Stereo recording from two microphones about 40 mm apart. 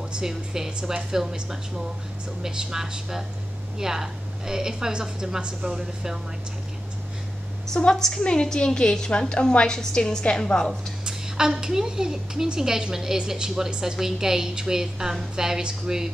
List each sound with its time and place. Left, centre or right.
0.2 s a woman's voice: centre
7.9 s a woman's voice: centre
8.2 s a woman's voice: left
9.3 s a woman's voice: left
11.1 s a woman's voice: centre